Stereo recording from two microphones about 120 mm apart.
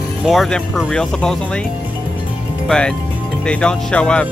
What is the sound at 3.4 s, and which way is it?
Speech, 10° left (ahead or behind).